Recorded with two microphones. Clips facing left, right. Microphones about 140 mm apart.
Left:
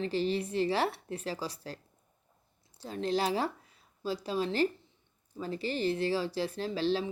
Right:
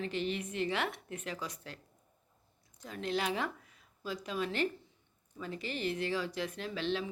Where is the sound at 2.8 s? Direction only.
30° left (ahead or behind).